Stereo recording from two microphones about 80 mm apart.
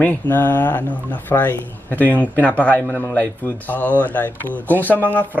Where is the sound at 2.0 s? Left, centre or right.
Right.